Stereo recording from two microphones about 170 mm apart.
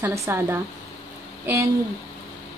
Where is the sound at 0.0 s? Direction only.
15° right (ahead or behind).